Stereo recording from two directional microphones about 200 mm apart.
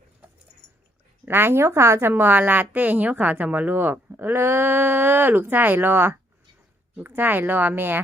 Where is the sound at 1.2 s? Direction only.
10° right (ahead or behind).